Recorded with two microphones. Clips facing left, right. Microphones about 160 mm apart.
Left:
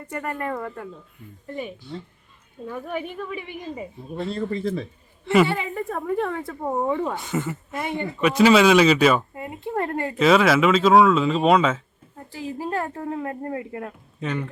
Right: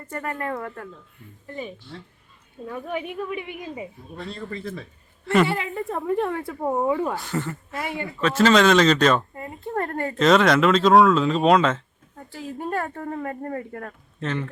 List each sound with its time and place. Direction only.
0.0 s speech: centre (ahead or behind)
7.8 s speech: 20° left (ahead or behind)
9.3 s a sound: 20° left (ahead or behind)
9.6 s speech: 5° left (ahead or behind)